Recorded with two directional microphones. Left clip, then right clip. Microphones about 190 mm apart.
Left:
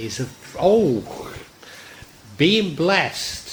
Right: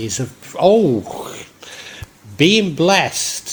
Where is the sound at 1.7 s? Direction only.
35° right (ahead or behind).